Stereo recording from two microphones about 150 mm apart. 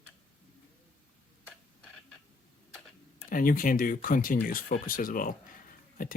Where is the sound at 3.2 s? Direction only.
70° left (ahead or behind).